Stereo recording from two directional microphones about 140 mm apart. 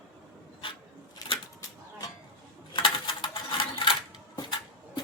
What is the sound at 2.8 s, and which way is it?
Coin, 35° left (ahead or behind).